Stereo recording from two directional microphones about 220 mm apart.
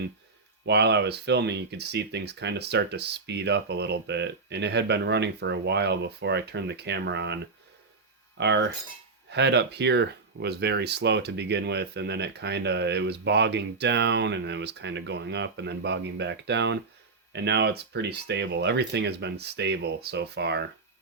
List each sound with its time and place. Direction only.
0.6 s speech: 50° right (ahead or behind)
8.4 s speech: 50° right (ahead or behind)